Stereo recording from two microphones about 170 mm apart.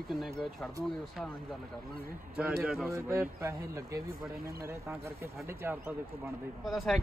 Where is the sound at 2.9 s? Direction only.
15° right (ahead or behind).